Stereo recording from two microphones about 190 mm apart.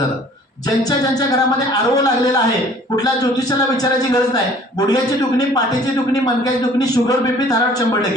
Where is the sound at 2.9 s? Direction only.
20° left (ahead or behind).